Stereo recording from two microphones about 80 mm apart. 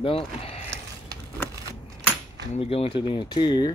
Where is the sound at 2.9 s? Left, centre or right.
Left.